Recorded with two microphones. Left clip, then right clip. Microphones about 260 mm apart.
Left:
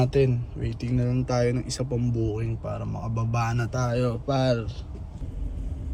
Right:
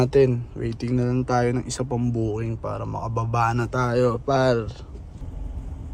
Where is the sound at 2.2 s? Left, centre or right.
Right.